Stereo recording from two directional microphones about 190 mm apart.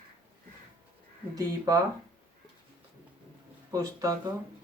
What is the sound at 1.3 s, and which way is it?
Speech, 20° right (ahead or behind).